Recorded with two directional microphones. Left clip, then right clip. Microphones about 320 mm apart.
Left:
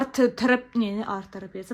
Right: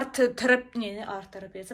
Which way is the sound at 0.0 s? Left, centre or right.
Centre.